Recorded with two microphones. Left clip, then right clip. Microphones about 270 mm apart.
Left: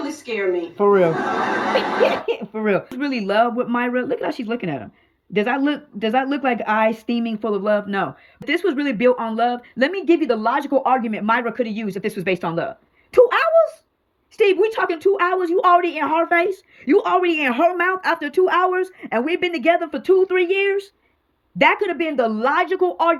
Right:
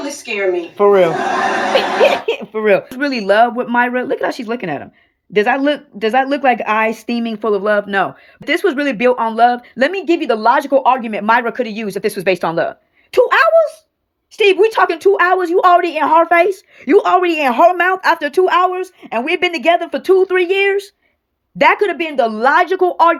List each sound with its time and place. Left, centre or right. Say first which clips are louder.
0.8 s a woman's voice: right 5 dB; centre
22.3 s speech: right 6 dB; right